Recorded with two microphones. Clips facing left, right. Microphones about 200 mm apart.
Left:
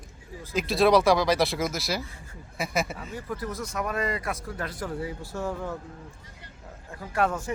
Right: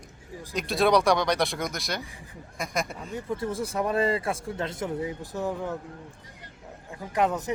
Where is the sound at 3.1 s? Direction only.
25° right (ahead or behind).